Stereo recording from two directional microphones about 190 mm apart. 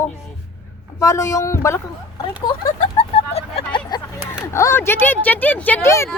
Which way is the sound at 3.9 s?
20° left (ahead or behind).